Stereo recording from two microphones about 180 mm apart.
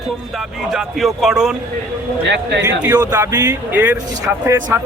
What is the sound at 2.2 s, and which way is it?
Speech, 75° right (ahead or behind).